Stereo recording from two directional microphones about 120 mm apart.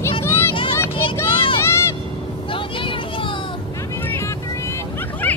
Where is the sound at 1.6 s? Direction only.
20° left (ahead or behind).